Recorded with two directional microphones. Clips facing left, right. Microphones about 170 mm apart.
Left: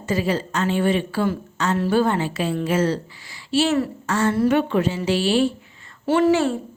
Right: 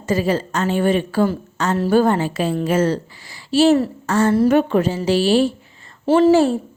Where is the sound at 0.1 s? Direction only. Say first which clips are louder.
Right 3 dB; 45° right (ahead or behind).